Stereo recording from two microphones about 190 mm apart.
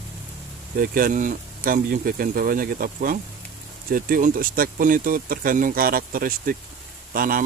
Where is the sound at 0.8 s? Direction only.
50° right (ahead or behind).